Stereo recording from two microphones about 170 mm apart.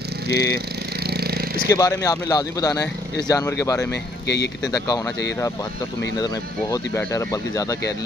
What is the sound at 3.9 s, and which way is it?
Speech, 80° left.